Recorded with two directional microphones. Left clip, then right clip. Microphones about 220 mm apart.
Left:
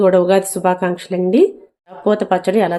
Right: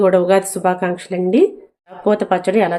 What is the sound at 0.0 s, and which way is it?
Speech, 10° left (ahead or behind).